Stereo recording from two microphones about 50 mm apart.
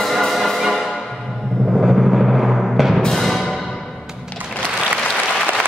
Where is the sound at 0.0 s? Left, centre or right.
Centre.